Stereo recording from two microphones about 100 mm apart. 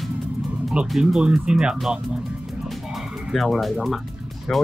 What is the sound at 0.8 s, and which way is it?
Speech, 5° right (ahead or behind).